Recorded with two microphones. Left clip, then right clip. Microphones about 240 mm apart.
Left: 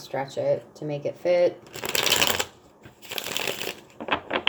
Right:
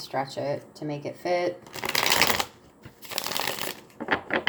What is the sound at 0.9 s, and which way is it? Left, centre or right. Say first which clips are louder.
Shuffling cards: left 4 dB; right.